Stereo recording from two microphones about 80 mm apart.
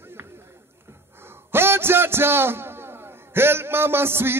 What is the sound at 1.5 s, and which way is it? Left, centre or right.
A man's voice, right.